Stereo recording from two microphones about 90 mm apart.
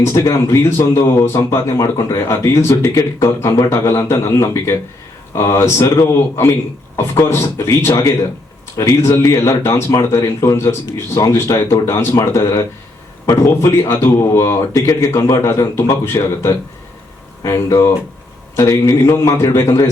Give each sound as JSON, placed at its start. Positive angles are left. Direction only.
{"t": 0.1, "sound": "speech", "side_deg": 40}